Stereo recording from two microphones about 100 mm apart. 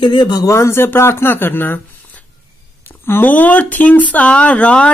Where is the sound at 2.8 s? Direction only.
20° left (ahead or behind).